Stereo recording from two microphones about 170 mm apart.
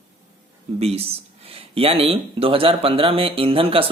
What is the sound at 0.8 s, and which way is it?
Speech, 35° right (ahead or behind).